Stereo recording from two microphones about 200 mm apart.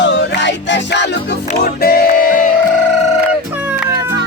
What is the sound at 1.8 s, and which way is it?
Music, 50° left (ahead or behind).